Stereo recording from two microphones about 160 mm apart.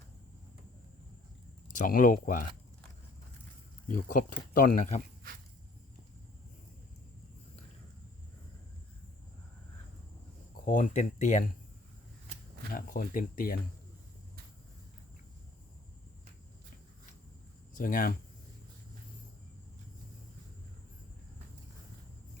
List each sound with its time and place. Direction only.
1.8 s speech: 60° left (ahead or behind)
3.8 s speech: 55° left (ahead or behind)
10.7 s speech: 55° left (ahead or behind)
12.7 s speech: 60° left (ahead or behind)
17.7 s speech: 60° left (ahead or behind)